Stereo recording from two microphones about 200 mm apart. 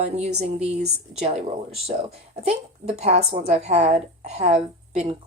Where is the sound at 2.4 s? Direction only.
30° right (ahead or behind).